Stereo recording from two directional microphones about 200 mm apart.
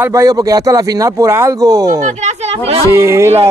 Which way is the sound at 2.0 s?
35° right (ahead or behind).